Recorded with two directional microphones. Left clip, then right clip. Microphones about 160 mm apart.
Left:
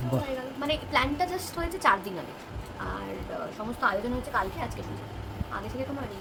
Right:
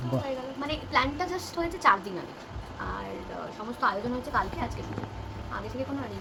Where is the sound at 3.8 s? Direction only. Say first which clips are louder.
Even; 15° left (ahead or behind).